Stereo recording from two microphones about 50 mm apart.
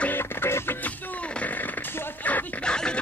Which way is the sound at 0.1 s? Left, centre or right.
Left.